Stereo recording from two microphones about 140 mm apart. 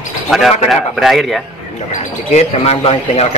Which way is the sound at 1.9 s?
50° left (ahead or behind).